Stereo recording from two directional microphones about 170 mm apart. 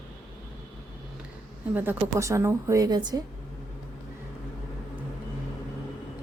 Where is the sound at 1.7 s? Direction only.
10° right (ahead or behind).